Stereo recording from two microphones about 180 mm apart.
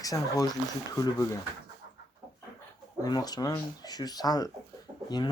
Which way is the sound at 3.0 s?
20° left (ahead or behind).